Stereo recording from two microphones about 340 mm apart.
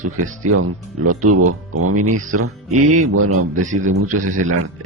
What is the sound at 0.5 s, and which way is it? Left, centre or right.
Speech, right.